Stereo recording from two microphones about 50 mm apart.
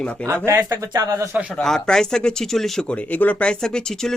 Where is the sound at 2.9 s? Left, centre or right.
Left.